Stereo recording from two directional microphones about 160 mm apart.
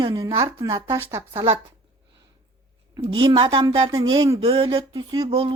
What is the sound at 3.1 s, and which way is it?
A woman's voice, 30° right (ahead or behind).